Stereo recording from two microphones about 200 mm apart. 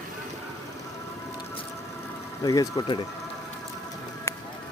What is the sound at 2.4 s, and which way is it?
Speech, 20° left (ahead or behind).